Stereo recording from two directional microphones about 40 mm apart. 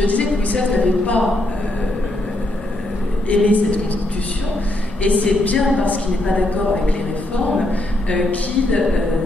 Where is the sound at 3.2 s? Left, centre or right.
Left.